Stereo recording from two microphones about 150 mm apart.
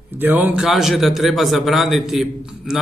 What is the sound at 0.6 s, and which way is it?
A man's voice, centre (ahead or behind).